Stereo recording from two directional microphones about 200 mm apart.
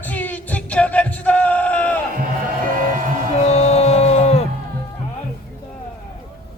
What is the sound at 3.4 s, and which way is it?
Music, 30° left (ahead or behind).